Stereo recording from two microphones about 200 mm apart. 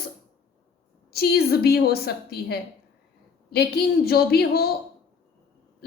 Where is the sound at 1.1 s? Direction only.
50° left (ahead or behind).